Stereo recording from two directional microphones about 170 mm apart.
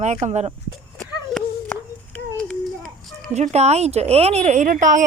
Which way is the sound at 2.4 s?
5° left (ahead or behind).